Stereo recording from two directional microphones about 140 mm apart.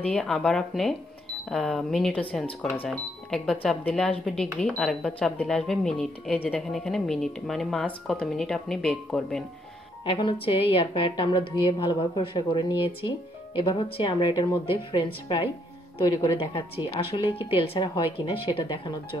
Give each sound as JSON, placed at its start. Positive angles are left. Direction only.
{"t": 0.1, "sound": "speech", "side_deg": 5}
{"t": 10.0, "sound": "a woman's voice", "side_deg": 40}
{"t": 14.7, "sound": "a woman's voice", "side_deg": 40}